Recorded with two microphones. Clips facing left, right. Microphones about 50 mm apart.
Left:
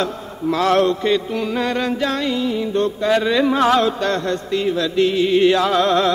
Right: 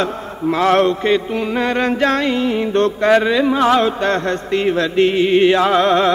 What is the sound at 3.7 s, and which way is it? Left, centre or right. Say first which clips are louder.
Chant: right 2 dB; right.